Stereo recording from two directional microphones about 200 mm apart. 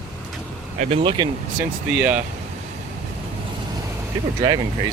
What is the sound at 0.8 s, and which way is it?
Speech, 30° right (ahead or behind).